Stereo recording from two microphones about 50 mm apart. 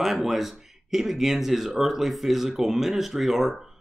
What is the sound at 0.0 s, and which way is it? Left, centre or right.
Speech, centre.